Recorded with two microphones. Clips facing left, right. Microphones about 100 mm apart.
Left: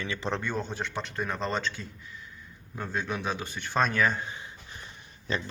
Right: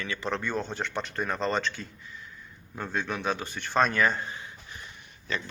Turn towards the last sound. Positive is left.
turn(degrees=30)  # may be behind; listen again after turning